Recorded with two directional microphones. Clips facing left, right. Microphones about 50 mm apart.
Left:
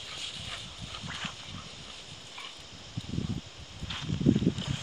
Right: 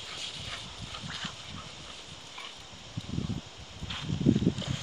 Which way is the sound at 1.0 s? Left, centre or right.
Centre.